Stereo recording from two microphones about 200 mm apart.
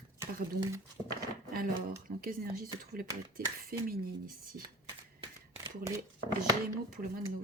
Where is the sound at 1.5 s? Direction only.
45° right (ahead or behind).